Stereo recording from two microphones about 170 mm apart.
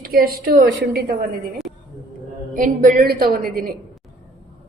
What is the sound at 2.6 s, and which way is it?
Speech, 50° right (ahead or behind).